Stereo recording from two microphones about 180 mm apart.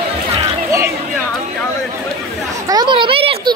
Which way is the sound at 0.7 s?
15° right (ahead or behind).